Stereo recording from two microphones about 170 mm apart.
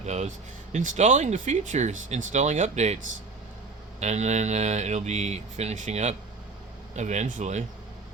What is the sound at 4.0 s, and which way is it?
Speech, 40° right (ahead or behind).